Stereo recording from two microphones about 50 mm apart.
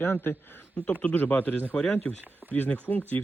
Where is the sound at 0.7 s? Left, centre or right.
Left.